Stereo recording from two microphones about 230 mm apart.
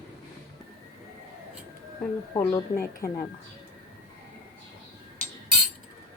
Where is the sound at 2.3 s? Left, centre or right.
Centre.